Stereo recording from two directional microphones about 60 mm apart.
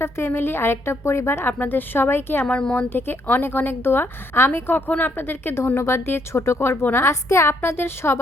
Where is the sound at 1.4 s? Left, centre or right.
Left.